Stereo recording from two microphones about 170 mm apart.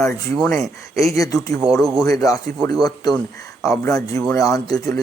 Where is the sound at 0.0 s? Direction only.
15° left (ahead or behind).